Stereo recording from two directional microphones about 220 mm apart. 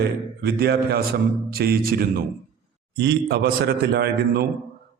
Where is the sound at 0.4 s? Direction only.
45° right (ahead or behind).